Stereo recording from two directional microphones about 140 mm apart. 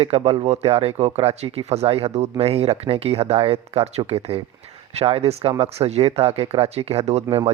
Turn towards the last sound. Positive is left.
turn(degrees=-45)  # may be behind; listen again after turning